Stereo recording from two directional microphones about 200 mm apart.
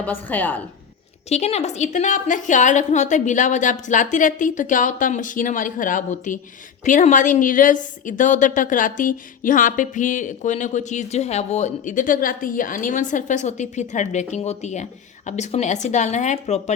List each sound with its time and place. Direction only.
0.0 s a woman's voice: 10° left (ahead or behind)
1.3 s speech: 35° left (ahead or behind)